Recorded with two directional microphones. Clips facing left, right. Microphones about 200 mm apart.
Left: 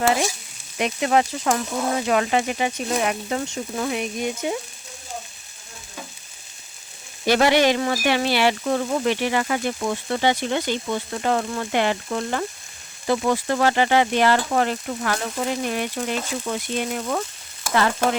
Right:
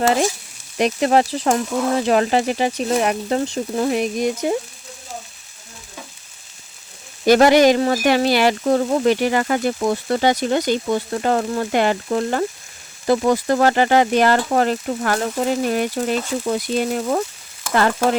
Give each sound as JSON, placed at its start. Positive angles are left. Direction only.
{"t": 0.8, "sound": "speech", "side_deg": -35}
{"t": 7.3, "sound": "speech", "side_deg": -45}
{"t": 17.7, "sound": "stir", "side_deg": -40}